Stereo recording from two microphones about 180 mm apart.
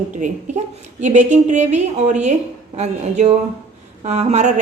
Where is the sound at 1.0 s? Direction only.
40° right (ahead or behind).